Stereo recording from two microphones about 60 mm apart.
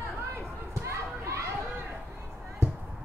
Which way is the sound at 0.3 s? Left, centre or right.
Right.